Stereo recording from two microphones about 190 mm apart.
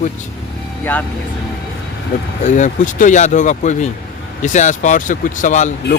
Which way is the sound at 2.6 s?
40° left (ahead or behind).